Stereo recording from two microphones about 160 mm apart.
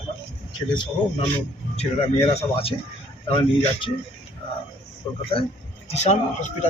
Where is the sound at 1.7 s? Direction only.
40° left (ahead or behind).